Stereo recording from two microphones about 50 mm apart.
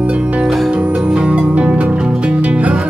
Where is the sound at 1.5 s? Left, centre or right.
Right.